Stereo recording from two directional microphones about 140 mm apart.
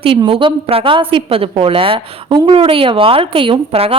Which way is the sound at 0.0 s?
40° right (ahead or behind).